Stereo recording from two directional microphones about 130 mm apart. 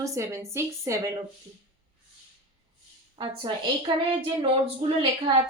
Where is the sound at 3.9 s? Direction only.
35° right (ahead or behind).